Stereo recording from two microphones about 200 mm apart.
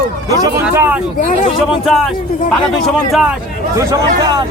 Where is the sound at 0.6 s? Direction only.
5° right (ahead or behind).